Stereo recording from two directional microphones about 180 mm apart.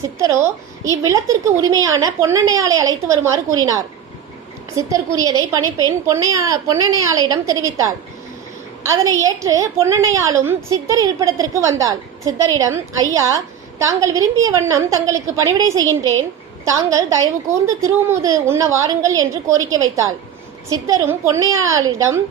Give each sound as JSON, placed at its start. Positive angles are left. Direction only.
{"t": 0.2, "sound": "a woman's voice", "side_deg": -15}
{"t": 4.8, "sound": "a woman's voice", "side_deg": -20}
{"t": 9.2, "sound": "a child's voice", "side_deg": -20}
{"t": 20.7, "sound": "a child's voice", "side_deg": -20}